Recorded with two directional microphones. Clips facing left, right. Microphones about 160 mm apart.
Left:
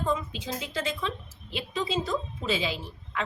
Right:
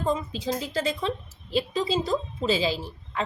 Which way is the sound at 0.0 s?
35° right (ahead or behind).